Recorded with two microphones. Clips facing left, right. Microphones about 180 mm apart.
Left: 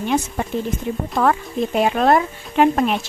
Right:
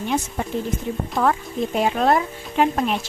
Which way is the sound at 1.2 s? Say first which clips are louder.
Left 2 dB; 65° left (ahead or behind).